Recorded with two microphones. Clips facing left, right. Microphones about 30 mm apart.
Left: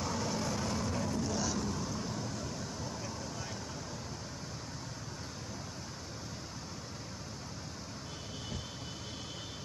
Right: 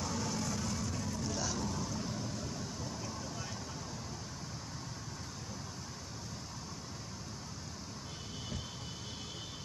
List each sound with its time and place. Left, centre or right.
0.0 s vehicle: centre
1.2 s vehicle: centre